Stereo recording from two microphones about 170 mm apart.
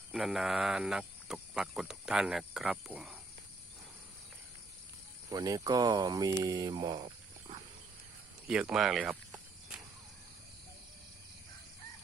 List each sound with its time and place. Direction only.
0.1 s speech: centre (ahead or behind)
5.3 s speech: 20° right (ahead or behind)
8.4 s cricket: 5° right (ahead or behind)